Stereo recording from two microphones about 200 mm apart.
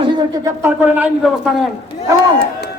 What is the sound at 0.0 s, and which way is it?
A man's voice, 25° right (ahead or behind).